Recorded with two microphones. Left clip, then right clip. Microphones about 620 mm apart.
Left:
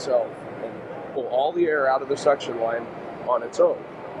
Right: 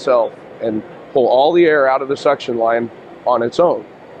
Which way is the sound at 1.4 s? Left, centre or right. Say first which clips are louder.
Right 7 dB; right.